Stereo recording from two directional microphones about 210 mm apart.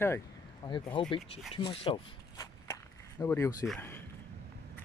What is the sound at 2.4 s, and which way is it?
Walk, 15° left (ahead or behind).